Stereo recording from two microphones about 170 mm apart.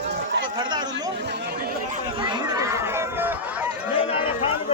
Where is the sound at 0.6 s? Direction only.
25° right (ahead or behind).